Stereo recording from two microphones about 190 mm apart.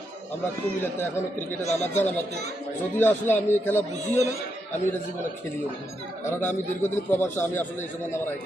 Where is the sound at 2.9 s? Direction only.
10° left (ahead or behind).